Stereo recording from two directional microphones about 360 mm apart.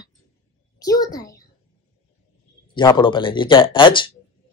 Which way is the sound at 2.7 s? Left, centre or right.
Centre.